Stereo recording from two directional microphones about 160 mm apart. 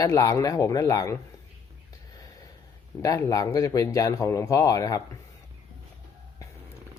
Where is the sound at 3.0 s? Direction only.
20° left (ahead or behind).